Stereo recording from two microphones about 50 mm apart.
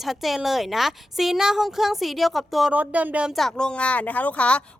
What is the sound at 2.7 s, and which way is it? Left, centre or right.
Speech, right.